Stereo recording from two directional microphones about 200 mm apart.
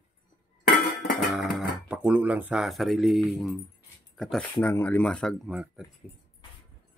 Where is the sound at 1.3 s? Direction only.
Centre (ahead or behind).